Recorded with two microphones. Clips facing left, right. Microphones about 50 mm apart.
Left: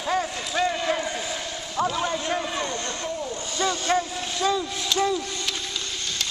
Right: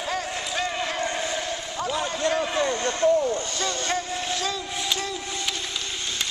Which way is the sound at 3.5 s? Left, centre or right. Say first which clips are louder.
Left 3 dB; centre.